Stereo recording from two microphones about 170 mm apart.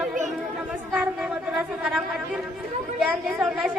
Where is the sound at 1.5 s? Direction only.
5° right (ahead or behind).